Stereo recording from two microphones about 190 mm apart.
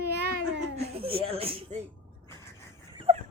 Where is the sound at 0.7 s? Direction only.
30° right (ahead or behind).